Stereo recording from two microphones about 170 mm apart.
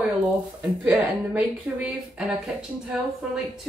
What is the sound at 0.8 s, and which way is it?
Speech, 5° right (ahead or behind).